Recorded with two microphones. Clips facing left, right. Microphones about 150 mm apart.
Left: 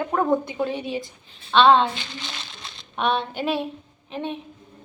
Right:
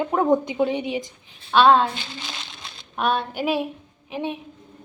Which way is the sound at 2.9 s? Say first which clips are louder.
Even; 5° right (ahead or behind).